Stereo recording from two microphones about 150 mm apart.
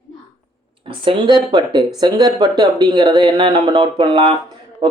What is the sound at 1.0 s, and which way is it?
Speech, 35° right (ahead or behind).